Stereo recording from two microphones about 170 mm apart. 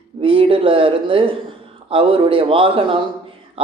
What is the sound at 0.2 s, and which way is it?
Speech, 30° right (ahead or behind).